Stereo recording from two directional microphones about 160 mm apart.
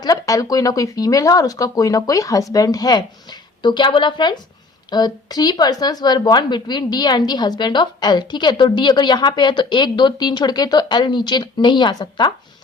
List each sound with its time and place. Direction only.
0.0 s a woman's voice: 20° left (ahead or behind)